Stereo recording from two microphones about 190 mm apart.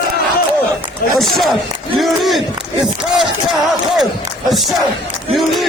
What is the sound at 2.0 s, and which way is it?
Battle cry, centre (ahead or behind).